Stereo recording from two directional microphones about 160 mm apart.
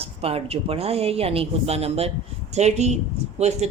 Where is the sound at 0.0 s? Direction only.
40° right (ahead or behind).